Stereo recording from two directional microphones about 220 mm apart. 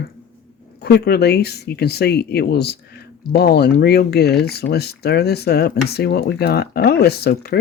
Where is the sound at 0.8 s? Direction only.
45° left (ahead or behind).